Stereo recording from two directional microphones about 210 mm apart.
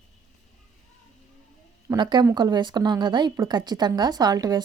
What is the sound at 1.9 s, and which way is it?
A woman's voice, 20° right (ahead or behind).